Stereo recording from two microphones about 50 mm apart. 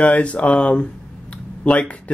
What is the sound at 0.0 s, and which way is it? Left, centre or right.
Speech, left.